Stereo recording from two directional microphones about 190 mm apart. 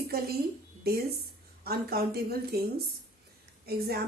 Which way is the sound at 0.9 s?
55° right (ahead or behind).